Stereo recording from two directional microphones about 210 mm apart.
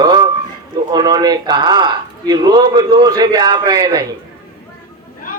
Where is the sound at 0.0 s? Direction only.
20° right (ahead or behind).